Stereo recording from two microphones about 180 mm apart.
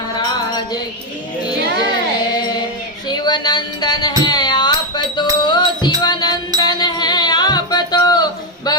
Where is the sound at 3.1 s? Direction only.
25° left (ahead or behind).